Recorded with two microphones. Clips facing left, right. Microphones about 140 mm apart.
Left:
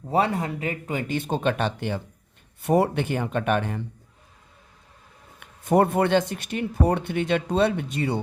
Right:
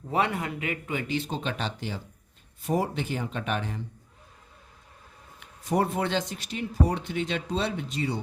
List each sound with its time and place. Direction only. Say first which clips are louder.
0.1 s a man's voice: left 4 dB; 35° left (ahead or behind); by 3.8 s 55° left (ahead or behind)
5.4 s a man's voice: left 6 dB; 55° left (ahead or behind)